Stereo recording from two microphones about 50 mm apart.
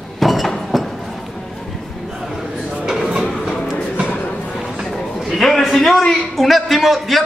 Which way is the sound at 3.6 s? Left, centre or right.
Centre.